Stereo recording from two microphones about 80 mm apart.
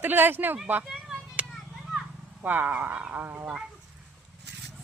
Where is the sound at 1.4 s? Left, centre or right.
Centre.